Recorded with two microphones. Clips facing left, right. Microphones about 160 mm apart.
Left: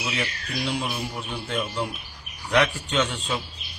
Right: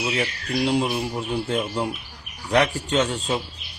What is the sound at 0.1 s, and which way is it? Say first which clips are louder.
Speech: right 5 dB; 35° right (ahead or behind).